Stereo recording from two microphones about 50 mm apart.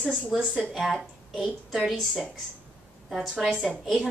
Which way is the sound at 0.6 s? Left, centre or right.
Centre.